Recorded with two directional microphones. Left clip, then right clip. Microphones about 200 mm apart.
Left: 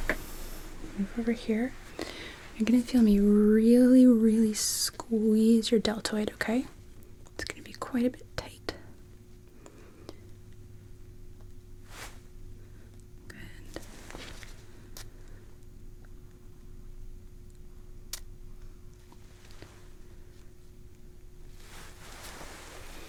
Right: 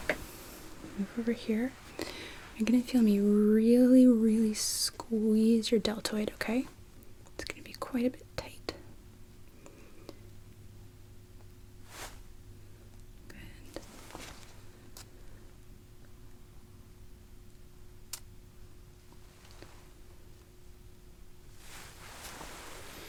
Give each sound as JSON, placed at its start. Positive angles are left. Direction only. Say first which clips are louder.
{"t": 1.3, "sound": "speech", "louder": "left 2 dB", "side_deg": 20}
{"t": 7.3, "sound": "whispering", "louder": "left 2 dB", "side_deg": 35}
{"t": 10.1, "sound": "a sound", "louder": "left 2 dB", "side_deg": 35}
{"t": 13.2, "sound": "whispering", "louder": "left 4 dB", "side_deg": 35}
{"t": 18.1, "sound": "tick", "louder": "left 4 dB", "side_deg": 35}